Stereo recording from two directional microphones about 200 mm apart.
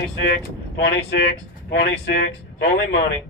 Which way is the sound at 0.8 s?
55° left (ahead or behind).